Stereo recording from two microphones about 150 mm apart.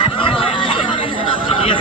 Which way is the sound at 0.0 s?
35° left (ahead or behind).